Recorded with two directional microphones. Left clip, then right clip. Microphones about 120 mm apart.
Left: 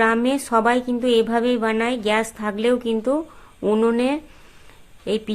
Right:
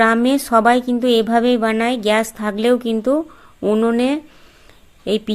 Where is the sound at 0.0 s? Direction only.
40° right (ahead or behind).